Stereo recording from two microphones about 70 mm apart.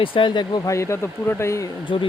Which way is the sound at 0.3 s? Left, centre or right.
Left.